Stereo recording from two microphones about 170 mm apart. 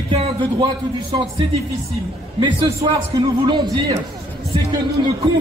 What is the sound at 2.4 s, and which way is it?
A man's voice, 25° right (ahead or behind).